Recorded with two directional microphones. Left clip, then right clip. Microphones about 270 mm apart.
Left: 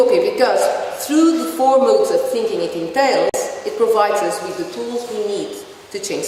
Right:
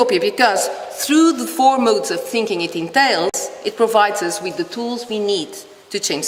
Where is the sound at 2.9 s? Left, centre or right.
Right.